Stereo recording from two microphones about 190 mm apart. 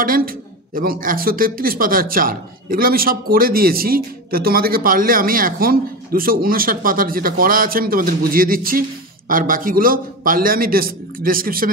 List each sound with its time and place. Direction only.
0.0 s speech: 50° right (ahead or behind)